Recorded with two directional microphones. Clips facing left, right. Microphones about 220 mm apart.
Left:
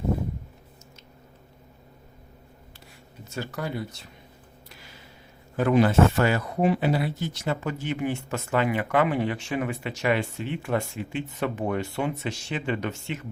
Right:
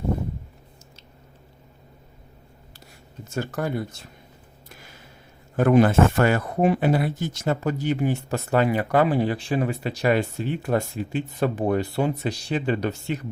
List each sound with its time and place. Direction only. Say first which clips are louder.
3.2 s speech: right 5 dB; 50° right (ahead or behind)
5.5 s speech: right 3 dB; 50° right (ahead or behind)